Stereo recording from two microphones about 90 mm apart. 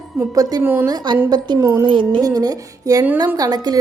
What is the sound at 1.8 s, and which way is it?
Music, 65° right (ahead or behind).